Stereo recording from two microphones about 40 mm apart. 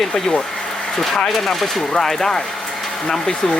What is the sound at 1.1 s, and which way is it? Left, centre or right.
Speech, centre.